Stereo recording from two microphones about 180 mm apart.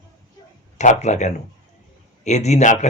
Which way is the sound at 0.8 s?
40° left (ahead or behind).